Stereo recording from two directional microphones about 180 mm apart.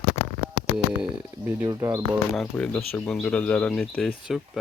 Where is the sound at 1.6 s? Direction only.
20° right (ahead or behind).